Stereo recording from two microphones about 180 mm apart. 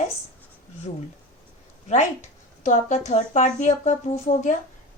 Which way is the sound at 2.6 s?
40° left (ahead or behind).